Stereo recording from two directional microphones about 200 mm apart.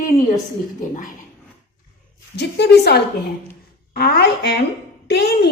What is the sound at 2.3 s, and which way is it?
A woman's voice, 55° left (ahead or behind).